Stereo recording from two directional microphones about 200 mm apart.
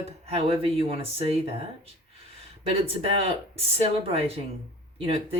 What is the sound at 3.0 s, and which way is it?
Speech, 30° right (ahead or behind).